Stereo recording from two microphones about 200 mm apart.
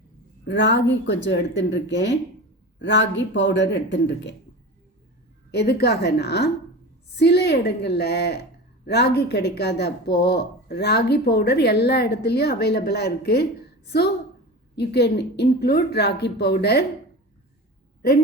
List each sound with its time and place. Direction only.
0.4 s speech: 65° left (ahead or behind)
5.5 s speech: 55° left (ahead or behind)
14.8 s speech: 55° left (ahead or behind)